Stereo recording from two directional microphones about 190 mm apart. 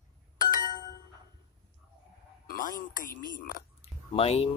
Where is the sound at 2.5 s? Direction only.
45° left (ahead or behind).